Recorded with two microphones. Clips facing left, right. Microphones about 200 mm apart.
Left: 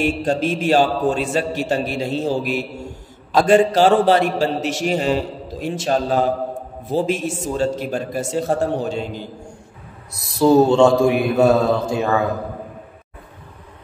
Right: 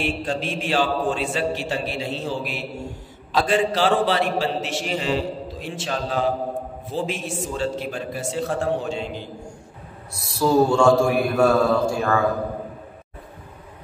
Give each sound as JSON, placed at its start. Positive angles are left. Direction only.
{"t": 0.0, "sound": "a man's voice", "side_deg": 45}
{"t": 10.1, "sound": "a man's voice", "side_deg": 20}